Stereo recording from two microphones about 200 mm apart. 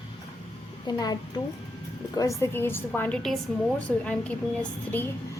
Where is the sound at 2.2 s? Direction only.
15° left (ahead or behind).